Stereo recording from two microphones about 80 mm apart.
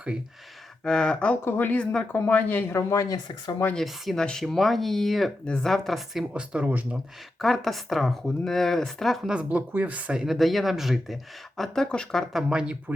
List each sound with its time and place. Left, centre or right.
0.9 s speech: centre
1.5 s speech: left
2.1 s speech: left
2.7 s speech: left
3.8 s speech: centre
6.3 s speech: centre
6.9 s speech: centre
9.3 s speech: centre
12.3 s speech: centre